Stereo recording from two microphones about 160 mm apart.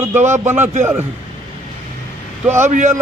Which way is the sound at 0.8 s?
10° right (ahead or behind).